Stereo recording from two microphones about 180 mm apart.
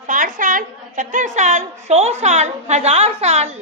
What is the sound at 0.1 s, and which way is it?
A woman's voice, 50° right (ahead or behind).